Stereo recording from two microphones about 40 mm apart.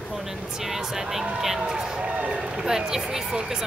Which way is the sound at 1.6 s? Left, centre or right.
Centre.